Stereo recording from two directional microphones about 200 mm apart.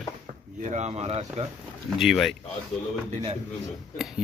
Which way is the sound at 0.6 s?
35° right (ahead or behind).